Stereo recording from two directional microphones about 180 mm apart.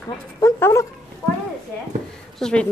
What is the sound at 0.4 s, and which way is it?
Speech, 15° left (ahead or behind).